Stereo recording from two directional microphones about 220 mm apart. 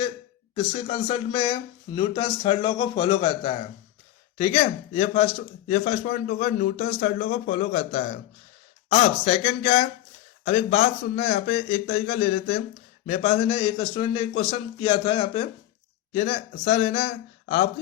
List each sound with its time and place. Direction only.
0.5 s speech: 30° left (ahead or behind)